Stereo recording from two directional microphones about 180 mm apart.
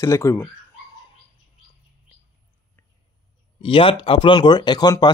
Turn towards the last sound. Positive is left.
turn(degrees=25)  # may be behind; listen again after turning